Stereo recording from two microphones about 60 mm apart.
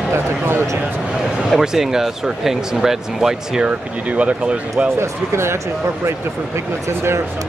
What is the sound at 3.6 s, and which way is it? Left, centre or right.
Speech, right.